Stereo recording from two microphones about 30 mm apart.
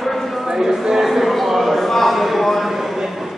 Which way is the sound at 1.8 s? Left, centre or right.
Centre.